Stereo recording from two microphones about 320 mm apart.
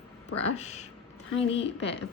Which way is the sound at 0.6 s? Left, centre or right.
Left.